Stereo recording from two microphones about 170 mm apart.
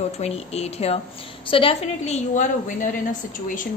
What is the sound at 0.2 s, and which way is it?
Speech, 35° left (ahead or behind).